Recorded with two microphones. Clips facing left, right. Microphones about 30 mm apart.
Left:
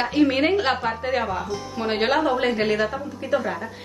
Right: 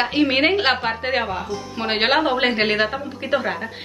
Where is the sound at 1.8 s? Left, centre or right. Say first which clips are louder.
Right 3 dB; right.